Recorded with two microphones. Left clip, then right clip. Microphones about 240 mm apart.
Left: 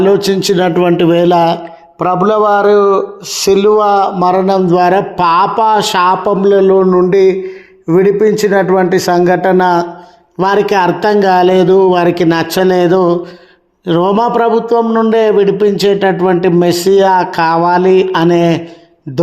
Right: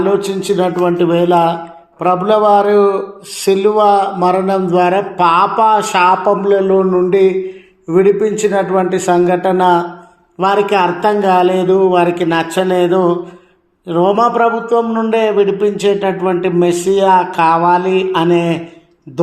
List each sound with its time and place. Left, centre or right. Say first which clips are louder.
0.0 s a man's voice: left 5 dB; left
2.0 s a man's voice: left 1 dB; left